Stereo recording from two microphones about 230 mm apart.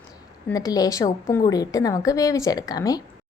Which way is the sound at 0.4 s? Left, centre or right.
Centre.